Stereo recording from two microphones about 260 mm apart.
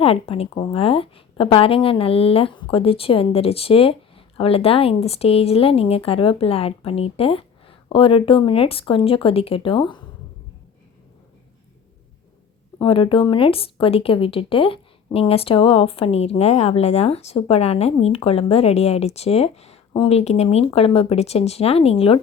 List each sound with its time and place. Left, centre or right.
0.0 s a woman's voice: left
12.8 s a woman's voice: centre